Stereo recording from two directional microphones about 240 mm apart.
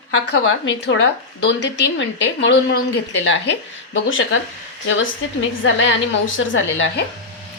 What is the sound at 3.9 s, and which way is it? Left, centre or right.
Speech, left.